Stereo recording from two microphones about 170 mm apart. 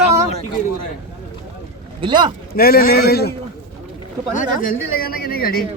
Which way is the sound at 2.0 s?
25° right (ahead or behind).